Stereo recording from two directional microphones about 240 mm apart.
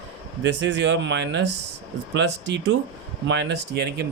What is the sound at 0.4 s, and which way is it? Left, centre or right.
Speech, right.